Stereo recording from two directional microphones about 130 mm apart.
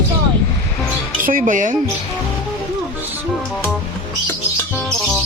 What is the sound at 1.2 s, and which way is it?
Speech, 90° right.